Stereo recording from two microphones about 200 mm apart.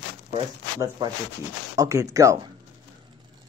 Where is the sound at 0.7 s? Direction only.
20° right (ahead or behind).